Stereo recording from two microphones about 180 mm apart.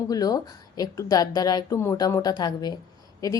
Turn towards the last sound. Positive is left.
turn(degrees=20)  # may be behind; listen again after turning